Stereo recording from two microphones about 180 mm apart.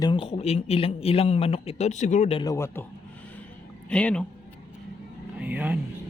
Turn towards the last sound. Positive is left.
turn(degrees=-10)  # may be behind; listen again after turning